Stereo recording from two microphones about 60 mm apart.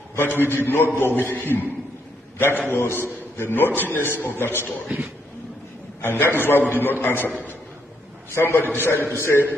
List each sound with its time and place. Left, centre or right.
0.1 s a man's voice: left
5.9 s a man's voice: left
8.4 s a man's voice: left